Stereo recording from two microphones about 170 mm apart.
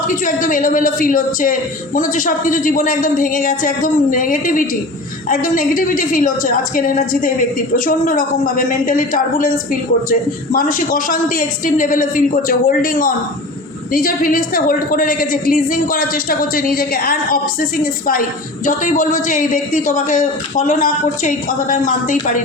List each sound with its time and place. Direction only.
0.1 s a man's voice: 50° left (ahead or behind)